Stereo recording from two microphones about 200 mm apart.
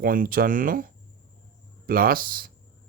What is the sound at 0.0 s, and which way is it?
Speech, 45° right (ahead or behind).